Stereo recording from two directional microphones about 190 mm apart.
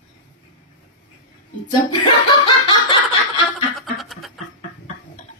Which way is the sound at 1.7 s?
25° left (ahead or behind).